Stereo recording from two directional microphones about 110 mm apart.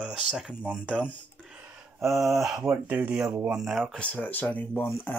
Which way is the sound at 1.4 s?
5° right (ahead or behind).